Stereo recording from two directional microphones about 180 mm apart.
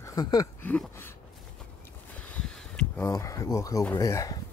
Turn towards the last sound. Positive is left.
turn(degrees=20)  # may be behind; listen again after turning